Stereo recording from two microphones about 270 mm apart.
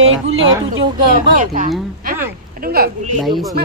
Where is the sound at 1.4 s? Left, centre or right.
Right.